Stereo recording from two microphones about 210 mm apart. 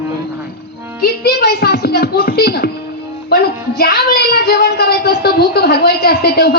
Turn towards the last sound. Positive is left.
turn(degrees=50)  # may be behind; listen again after turning